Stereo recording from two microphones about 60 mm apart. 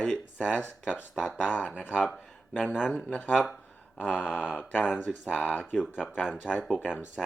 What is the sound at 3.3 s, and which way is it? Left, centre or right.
Speech, centre.